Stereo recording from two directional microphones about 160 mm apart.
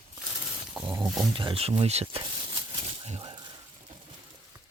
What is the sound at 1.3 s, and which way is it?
Speech, 30° right (ahead or behind).